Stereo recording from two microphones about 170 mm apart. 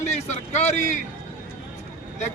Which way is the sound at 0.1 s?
40° left (ahead or behind).